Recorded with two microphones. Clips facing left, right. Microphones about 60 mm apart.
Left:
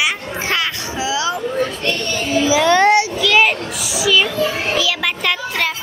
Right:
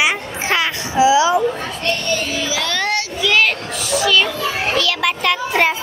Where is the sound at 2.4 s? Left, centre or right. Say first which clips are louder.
Left 8 dB; centre.